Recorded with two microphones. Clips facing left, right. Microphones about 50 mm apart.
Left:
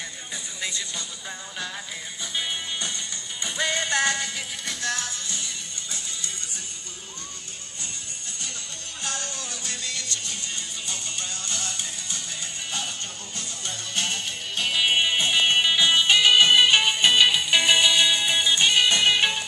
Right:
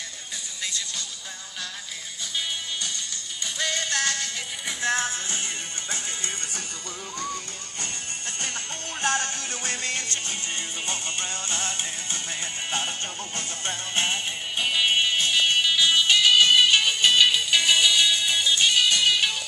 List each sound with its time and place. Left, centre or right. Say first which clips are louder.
3.5 s music: left 3 dB; centre
4.8 s music: right 5 dB; right
9.0 s music: right 7 dB; right
13.7 s music: right 3 dB; right
14.6 s music: even; centre
15.0 s music: left 1 dB; centre